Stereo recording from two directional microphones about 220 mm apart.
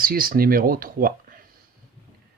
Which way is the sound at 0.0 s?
40° right (ahead or behind).